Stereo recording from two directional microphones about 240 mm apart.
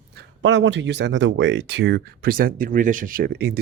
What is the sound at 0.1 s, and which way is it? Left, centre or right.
Speech, right.